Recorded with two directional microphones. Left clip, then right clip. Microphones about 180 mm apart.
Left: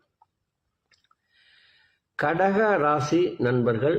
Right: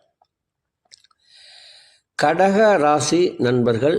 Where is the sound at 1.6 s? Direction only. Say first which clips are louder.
Right 12 dB; 40° right (ahead or behind).